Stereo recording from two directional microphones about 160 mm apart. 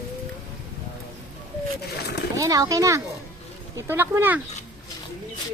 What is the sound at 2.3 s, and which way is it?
A child's voice, 20° right (ahead or behind).